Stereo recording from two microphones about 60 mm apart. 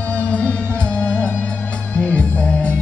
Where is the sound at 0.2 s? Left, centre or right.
Left.